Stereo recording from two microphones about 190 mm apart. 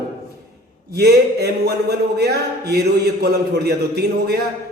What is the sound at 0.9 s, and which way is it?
Speech, 60° right (ahead or behind).